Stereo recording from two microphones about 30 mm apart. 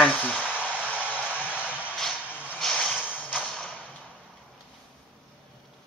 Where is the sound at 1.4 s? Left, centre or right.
Left.